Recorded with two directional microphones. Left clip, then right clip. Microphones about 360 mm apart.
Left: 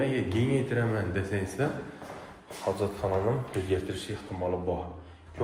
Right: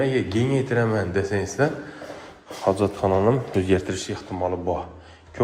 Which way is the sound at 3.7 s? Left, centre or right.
Centre.